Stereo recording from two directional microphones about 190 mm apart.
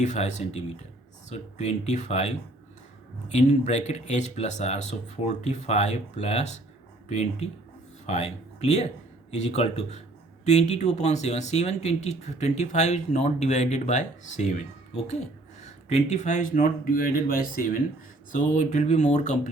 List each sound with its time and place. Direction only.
0.0 s speech: 40° left (ahead or behind)